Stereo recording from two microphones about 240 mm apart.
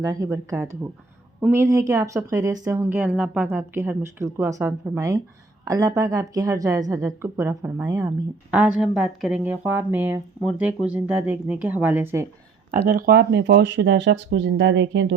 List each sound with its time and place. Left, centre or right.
0.0 s speech: centre
12.7 s speech: right